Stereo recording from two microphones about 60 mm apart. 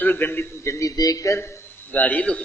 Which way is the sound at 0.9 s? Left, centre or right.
Left.